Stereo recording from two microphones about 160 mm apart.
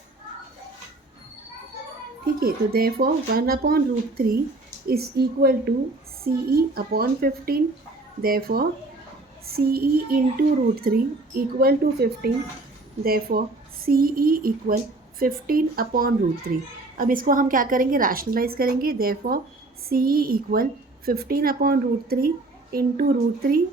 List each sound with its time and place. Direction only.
2.4 s a child's voice: 70° right (ahead or behind)